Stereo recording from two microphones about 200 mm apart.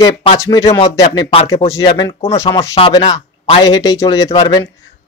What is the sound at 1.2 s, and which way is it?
Speech, 30° left (ahead or behind).